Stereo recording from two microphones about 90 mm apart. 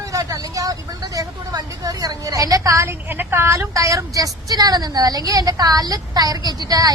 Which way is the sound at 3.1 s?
20° right (ahead or behind).